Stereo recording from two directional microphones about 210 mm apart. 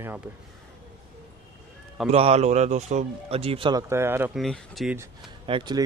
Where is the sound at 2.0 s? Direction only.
30° right (ahead or behind).